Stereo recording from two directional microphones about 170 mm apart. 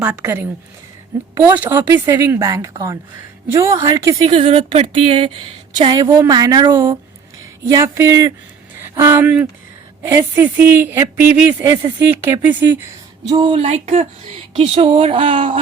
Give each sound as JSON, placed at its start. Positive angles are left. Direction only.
{"t": 0.0, "sound": "speech", "side_deg": -10}
{"t": 4.3, "sound": "a woman's voice", "side_deg": -30}
{"t": 13.3, "sound": "speech", "side_deg": -30}